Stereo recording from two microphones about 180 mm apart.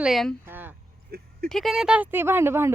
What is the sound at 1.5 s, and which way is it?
A child's voice, centre (ahead or behind).